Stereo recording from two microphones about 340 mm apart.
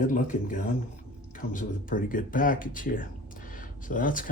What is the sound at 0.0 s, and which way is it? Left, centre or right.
Speech, left.